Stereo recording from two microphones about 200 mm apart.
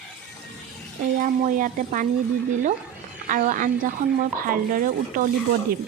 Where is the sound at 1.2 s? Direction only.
40° right (ahead or behind).